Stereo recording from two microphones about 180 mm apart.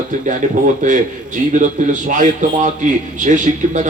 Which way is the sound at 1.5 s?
45° right (ahead or behind).